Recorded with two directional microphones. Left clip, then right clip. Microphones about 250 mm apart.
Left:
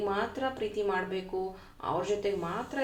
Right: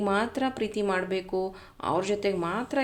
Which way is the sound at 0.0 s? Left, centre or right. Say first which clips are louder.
Right 4 dB; right.